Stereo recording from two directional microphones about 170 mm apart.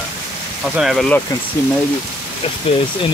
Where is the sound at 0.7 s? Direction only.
Centre (ahead or behind).